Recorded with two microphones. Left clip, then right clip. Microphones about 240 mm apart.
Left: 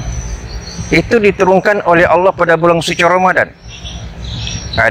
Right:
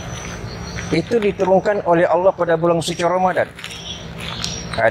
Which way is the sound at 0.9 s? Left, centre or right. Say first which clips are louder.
Left 8 dB; left.